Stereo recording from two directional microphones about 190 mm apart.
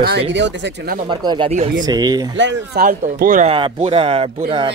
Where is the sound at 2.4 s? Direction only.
70° right (ahead or behind).